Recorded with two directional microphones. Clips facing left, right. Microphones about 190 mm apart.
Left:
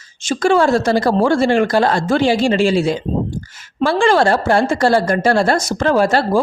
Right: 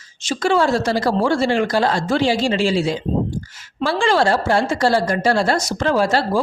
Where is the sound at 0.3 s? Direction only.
50° left (ahead or behind).